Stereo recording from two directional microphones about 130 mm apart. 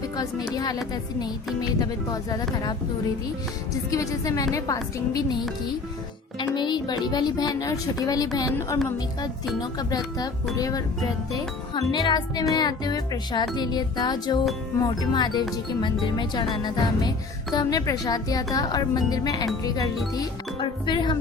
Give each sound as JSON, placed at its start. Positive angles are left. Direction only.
{"t": 0.5, "sound": "speech", "side_deg": 30}
{"t": 1.8, "sound": "speech", "side_deg": 30}
{"t": 3.9, "sound": "a woman's voice", "side_deg": 25}
{"t": 6.4, "sound": "speech", "side_deg": 35}
{"t": 9.6, "sound": "a woman's voice", "side_deg": 30}